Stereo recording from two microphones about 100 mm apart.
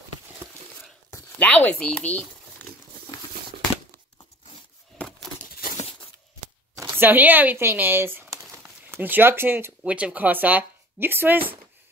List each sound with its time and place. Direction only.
1.4 s speech: 15° left (ahead or behind)
4.9 s a sound: 5° left (ahead or behind)
7.0 s speech: 20° right (ahead or behind)
9.8 s speech: 15° right (ahead or behind)